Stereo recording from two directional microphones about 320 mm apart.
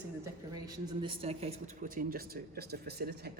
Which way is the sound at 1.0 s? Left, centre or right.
Centre.